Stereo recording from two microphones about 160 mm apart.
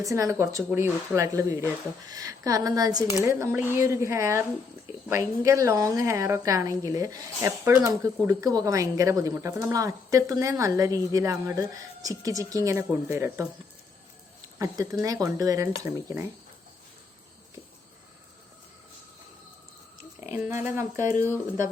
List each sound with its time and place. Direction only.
0.0 s a woman's voice: 20° right (ahead or behind)
15.0 s a woman's voice: 20° right (ahead or behind)
20.3 s a woman's voice: 15° right (ahead or behind)